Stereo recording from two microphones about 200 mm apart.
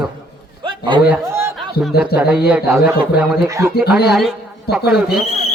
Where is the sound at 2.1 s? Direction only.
5° right (ahead or behind).